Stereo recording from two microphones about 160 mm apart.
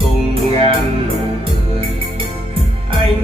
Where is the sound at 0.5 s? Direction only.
35° right (ahead or behind).